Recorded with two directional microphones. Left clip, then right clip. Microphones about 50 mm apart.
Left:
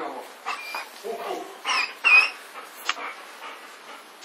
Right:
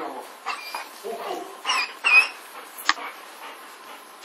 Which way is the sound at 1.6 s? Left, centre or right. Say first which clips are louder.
Left 1 dB; right.